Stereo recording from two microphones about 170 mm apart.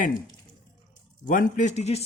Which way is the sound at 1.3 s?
50° left (ahead or behind).